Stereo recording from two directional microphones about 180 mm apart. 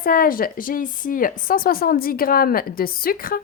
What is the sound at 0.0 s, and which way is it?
A woman's voice, 55° left (ahead or behind).